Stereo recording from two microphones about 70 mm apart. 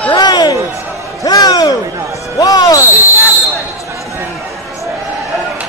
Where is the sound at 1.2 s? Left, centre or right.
Left.